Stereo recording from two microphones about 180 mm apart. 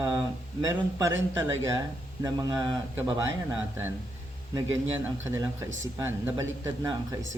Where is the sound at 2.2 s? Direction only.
25° right (ahead or behind).